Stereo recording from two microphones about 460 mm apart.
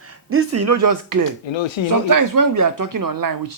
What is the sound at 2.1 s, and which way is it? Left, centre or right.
Speech, right.